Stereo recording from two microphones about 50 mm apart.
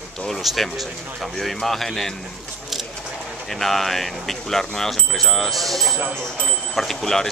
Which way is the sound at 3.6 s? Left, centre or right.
Centre.